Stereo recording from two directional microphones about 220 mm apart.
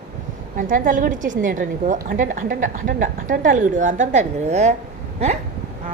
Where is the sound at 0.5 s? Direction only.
35° right (ahead or behind).